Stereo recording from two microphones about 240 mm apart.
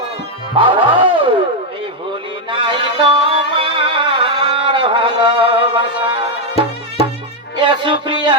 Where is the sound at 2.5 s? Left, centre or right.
Right.